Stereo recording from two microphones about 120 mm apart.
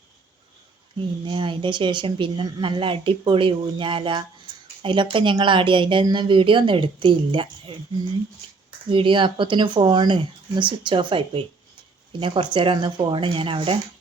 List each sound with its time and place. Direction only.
0.9 s speech: 45° right (ahead or behind)
8.9 s speech: 45° right (ahead or behind)